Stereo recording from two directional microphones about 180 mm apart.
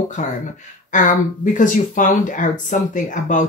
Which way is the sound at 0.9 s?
45° left (ahead or behind).